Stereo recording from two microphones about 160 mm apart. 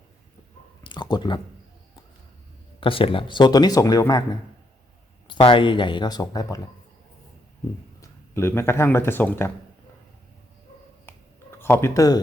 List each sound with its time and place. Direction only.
0.9 s a sound: 25° left (ahead or behind)
2.8 s speech: 35° left (ahead or behind)
5.3 s speech: 30° left (ahead or behind)
8.0 s speech: 15° left (ahead or behind)
11.5 s speech: 15° left (ahead or behind)